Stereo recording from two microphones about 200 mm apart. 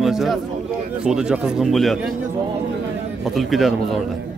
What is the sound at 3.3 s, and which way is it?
Speech, centre (ahead or behind).